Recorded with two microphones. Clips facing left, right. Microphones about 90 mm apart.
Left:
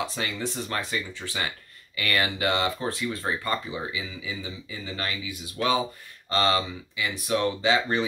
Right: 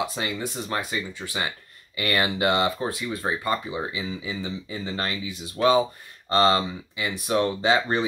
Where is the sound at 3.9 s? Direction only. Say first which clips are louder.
Right 3 dB; 35° right (ahead or behind).